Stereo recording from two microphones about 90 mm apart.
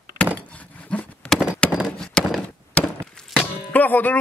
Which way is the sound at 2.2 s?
10° left (ahead or behind).